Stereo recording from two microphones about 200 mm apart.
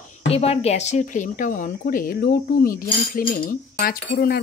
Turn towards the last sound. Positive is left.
turn(degrees=45)  # may be behind; listen again after turning